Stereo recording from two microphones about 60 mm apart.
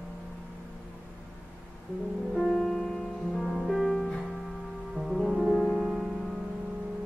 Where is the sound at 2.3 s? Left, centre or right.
Centre.